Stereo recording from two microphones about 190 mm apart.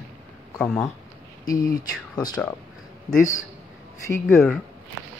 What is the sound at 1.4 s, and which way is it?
Speech, 20° left (ahead or behind).